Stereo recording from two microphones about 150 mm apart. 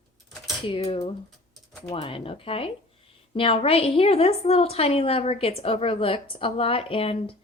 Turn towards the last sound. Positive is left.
turn(degrees=40)  # may be behind; listen again after turning